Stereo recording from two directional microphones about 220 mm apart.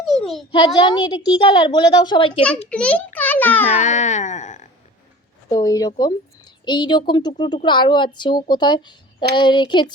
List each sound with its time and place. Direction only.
0.0 s a sound: centre (ahead or behind)
0.5 s a woman's voice: 20° left (ahead or behind)
2.6 s a child's voice: 5° left (ahead or behind)
3.8 s speech: 35° left (ahead or behind)
5.5 s a woman's voice: 15° left (ahead or behind)